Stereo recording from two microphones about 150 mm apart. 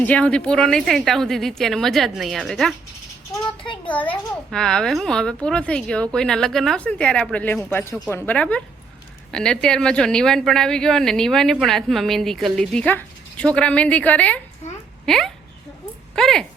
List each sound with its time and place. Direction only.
0.0 s speech: 10° left (ahead or behind)
3.8 s speech: 10° left (ahead or behind)